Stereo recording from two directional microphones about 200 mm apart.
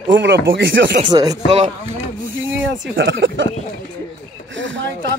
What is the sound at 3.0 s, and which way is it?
Speech, 70° right (ahead or behind).